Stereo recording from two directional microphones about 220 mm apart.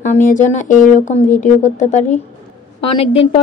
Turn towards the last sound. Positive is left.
turn(degrees=25)  # may be behind; listen again after turning